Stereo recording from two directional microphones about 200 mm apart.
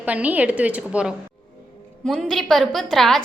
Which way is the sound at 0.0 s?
5° right (ahead or behind).